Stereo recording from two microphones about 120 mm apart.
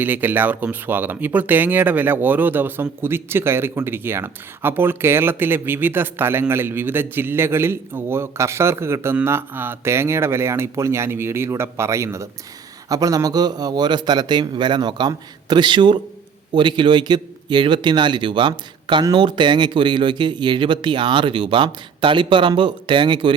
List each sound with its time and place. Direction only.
0.0 s speech: 15° right (ahead or behind); by 23.3 s 40° right (ahead or behind)